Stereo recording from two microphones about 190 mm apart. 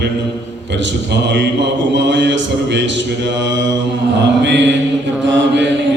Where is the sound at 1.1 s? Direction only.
65° right (ahead or behind).